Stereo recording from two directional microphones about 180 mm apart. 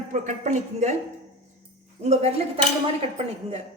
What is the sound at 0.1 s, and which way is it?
Speech, 40° right (ahead or behind).